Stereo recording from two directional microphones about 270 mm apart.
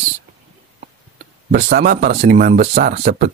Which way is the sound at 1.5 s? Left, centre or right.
Right.